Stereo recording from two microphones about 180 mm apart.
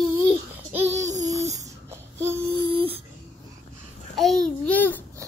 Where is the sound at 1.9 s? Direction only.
15° right (ahead or behind).